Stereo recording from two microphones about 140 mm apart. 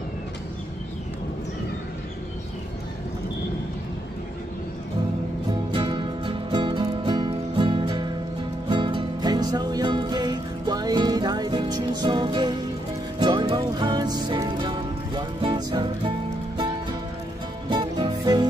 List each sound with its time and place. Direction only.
5.7 s music: 35° right (ahead or behind)
17.6 s music: 30° right (ahead or behind)